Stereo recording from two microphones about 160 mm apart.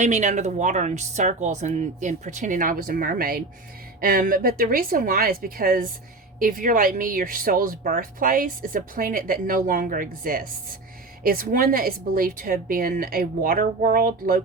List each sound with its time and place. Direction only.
0.0 s speech: 50° right (ahead or behind); by 14.4 s 65° right (ahead or behind)